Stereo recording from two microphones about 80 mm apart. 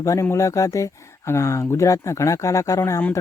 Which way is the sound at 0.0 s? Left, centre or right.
Left.